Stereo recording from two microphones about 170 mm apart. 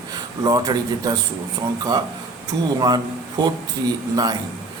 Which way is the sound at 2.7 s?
25° right (ahead or behind).